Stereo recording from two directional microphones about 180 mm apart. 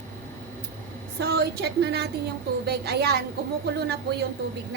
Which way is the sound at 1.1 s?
65° right (ahead or behind).